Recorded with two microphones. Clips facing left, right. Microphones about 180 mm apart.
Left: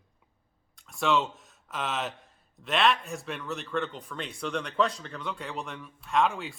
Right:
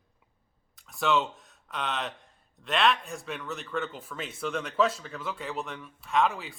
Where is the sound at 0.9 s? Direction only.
Centre (ahead or behind).